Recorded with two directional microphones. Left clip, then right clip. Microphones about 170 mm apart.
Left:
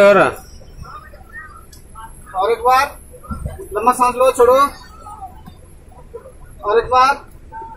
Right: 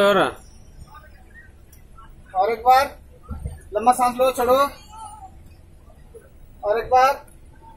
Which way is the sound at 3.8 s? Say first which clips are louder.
Left 4 dB; 15° right (ahead or behind).